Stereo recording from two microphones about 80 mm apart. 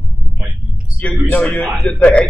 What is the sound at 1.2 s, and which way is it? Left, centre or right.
Speech, centre.